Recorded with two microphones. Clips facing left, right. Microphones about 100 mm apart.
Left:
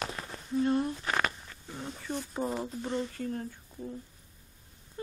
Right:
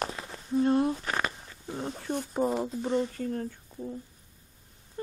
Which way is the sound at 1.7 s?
35° right (ahead or behind).